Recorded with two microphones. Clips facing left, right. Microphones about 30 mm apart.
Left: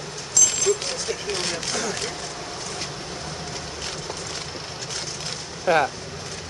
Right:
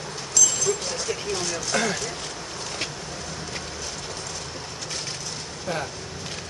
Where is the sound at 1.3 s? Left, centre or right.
Left.